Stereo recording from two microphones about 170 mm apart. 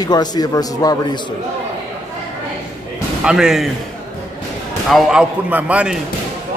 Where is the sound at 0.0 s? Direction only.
25° left (ahead or behind).